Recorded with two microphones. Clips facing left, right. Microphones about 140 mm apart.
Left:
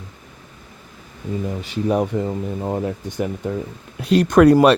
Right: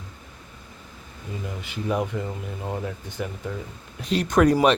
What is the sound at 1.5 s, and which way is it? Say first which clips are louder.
Speech: left 6 dB; 40° left (ahead or behind).